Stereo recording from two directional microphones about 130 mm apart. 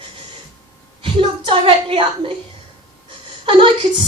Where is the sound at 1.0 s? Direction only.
40° right (ahead or behind).